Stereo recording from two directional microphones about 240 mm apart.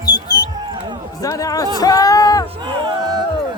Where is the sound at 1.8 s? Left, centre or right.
Centre.